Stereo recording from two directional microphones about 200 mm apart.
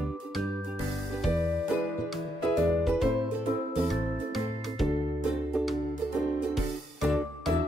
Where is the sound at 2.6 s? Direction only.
Centre (ahead or behind).